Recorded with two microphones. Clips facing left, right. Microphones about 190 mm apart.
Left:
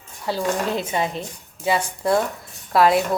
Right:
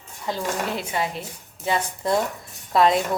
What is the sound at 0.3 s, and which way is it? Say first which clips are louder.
Speech: left 4 dB; 15° left (ahead or behind).